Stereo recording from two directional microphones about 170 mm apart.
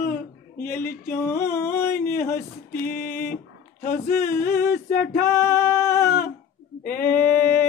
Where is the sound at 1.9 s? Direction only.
60° left (ahead or behind).